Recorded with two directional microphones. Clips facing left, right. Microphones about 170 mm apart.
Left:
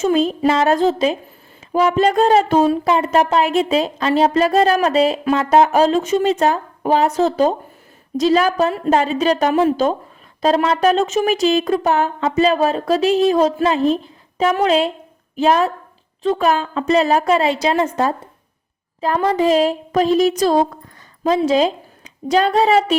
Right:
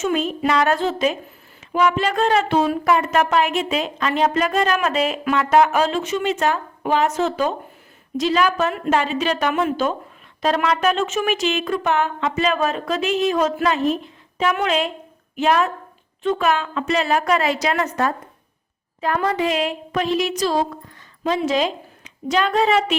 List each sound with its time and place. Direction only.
0.0 s a woman's voice: 35° left (ahead or behind)
2.8 s a woman's voice: 25° left (ahead or behind); by 20.7 s 50° left (ahead or behind)
21.2 s a woman's voice: 35° left (ahead or behind)